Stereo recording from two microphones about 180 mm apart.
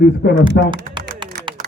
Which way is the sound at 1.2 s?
25° right (ahead or behind).